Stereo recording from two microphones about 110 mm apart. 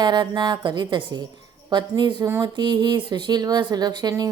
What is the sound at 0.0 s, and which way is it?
Speech, 40° right (ahead or behind).